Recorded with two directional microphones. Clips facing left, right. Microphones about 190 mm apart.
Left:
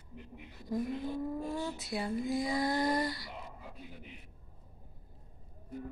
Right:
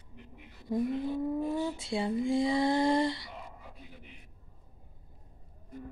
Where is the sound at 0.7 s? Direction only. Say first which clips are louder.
Right 4 dB; 25° right (ahead or behind).